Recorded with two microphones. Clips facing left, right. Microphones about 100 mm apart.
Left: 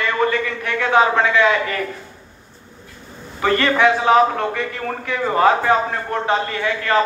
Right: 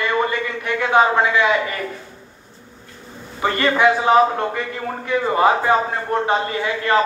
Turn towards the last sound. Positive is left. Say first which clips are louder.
# even
turn(degrees=-20)  # may be behind; listen again after turning